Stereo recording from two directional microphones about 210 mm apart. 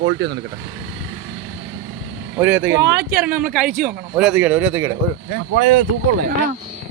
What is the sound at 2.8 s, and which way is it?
Speech, 55° right (ahead or behind).